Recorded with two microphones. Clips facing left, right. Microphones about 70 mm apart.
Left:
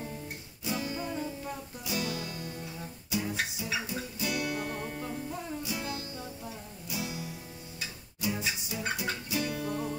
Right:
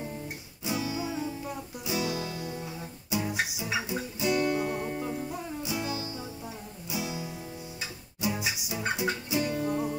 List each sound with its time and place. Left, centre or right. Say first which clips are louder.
0.7 s music: right 3 dB; centre
1.9 s music: right 3 dB; centre
4.3 s music: right 7 dB; right
4.6 s music: right 5 dB; centre